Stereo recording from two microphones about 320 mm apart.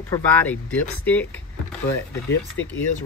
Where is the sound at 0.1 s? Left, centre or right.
Centre.